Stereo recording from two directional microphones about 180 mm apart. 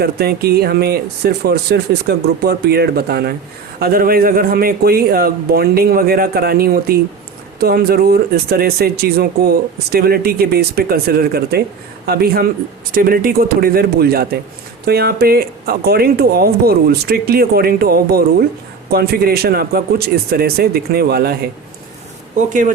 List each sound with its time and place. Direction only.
0.0 s speech: 60° right (ahead or behind)